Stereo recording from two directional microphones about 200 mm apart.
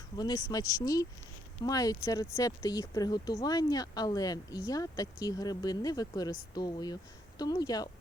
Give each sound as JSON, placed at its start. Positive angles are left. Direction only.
{"t": 0.2, "sound": "speech", "side_deg": 20}